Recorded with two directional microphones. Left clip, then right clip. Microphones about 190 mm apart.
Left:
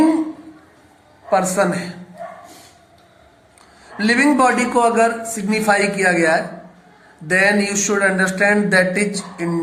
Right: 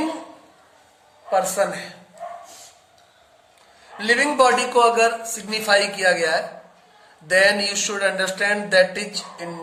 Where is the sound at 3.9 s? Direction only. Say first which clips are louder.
Left 2 dB; 20° right (ahead or behind).